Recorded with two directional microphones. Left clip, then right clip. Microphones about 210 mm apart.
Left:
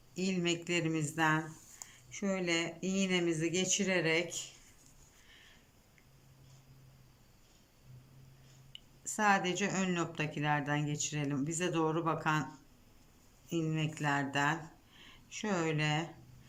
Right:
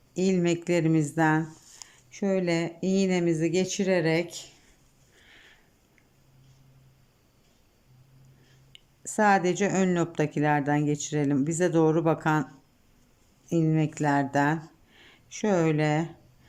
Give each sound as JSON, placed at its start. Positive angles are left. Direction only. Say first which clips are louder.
{"t": 0.1, "sound": "speech", "louder": "right 9 dB", "side_deg": -30}
{"t": 8.7, "sound": "speech", "louder": "right 10 dB", "side_deg": -30}
{"t": 13.5, "sound": "speech", "louder": "right 10 dB", "side_deg": -25}